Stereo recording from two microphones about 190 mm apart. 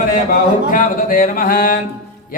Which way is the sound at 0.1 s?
45° left (ahead or behind).